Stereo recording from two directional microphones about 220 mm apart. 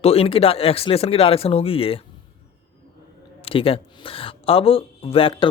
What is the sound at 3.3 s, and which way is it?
Speech, 25° left (ahead or behind).